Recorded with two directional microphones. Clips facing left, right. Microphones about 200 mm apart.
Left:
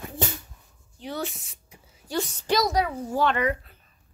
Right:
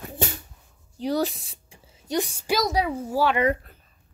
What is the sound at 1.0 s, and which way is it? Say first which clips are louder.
Speech: right 8 dB; 35° right (ahead or behind).